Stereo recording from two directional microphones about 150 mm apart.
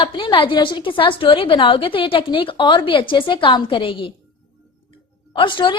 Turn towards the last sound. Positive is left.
turn(degrees=35)  # may be behind; listen again after turning